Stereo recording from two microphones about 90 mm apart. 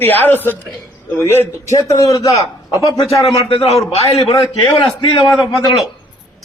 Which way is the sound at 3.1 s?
90° left.